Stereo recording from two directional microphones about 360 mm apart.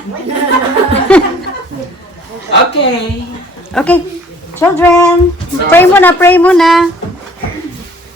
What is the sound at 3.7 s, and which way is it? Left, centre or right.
A woman's voice, centre.